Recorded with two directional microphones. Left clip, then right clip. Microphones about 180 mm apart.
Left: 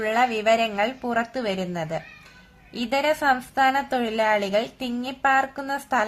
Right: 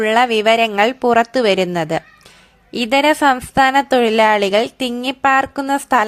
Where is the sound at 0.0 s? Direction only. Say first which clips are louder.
Right 8 dB; 40° right (ahead or behind).